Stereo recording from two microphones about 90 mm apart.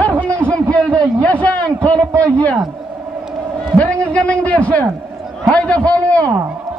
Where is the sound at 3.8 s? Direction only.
15° left (ahead or behind).